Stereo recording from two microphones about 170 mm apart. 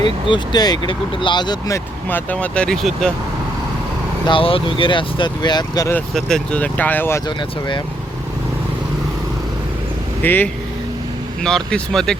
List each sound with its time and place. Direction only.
0.3 s speech: 25° left (ahead or behind); by 3.1 s centre (ahead or behind)
4.3 s speech: 30° left (ahead or behind)
6.1 s speech: 5° left (ahead or behind)
10.2 s speech: 10° left (ahead or behind)